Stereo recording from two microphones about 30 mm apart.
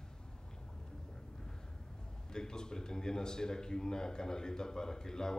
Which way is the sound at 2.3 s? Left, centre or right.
Left.